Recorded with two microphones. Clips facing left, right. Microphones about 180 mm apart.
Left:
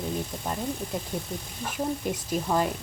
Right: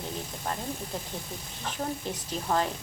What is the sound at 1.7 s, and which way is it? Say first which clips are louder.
Speech: left 4 dB; 10° left (ahead or behind).